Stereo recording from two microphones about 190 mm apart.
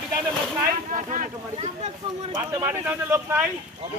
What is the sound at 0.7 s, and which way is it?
Speech, 45° right (ahead or behind).